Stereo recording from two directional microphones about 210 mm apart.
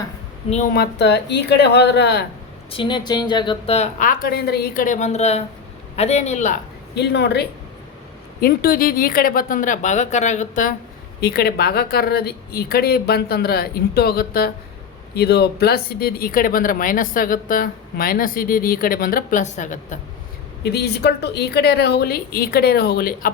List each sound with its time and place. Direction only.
0.5 s speech: 40° left (ahead or behind)
2.7 s a woman's voice: 20° left (ahead or behind)
6.9 s a woman's voice: 55° left (ahead or behind); by 20.0 s 35° left (ahead or behind)
20.7 s speech: 50° left (ahead or behind)